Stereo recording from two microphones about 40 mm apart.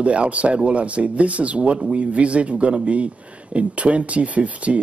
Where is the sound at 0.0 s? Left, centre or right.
Right.